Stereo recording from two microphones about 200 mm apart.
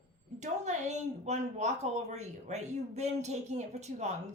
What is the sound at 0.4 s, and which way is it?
A woman's voice, 35° right (ahead or behind).